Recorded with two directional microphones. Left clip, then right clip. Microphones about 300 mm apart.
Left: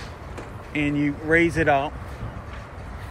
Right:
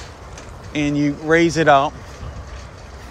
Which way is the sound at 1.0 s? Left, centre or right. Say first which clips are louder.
Right 4 dB; centre.